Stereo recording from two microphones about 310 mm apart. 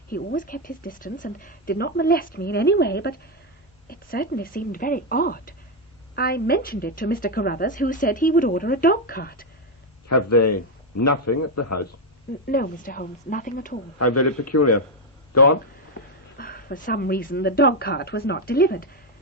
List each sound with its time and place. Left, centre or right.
0.1 s speech: left
10.1 s a man's voice: left
12.5 s speech: left
14.0 s a man's voice: left
16.4 s speech: left